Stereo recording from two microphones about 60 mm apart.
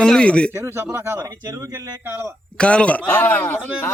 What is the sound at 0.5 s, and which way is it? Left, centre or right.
Speech, right.